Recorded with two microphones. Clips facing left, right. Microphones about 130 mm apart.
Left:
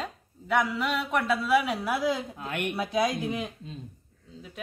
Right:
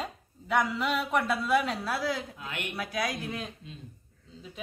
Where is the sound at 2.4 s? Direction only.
50° left (ahead or behind).